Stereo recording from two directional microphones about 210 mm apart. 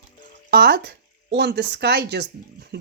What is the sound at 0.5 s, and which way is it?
Speech, 50° right (ahead or behind).